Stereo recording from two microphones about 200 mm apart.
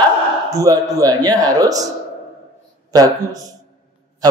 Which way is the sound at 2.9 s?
20° right (ahead or behind).